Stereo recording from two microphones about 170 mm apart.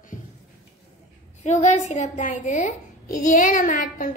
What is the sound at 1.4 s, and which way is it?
A child's voice, 45° left (ahead or behind).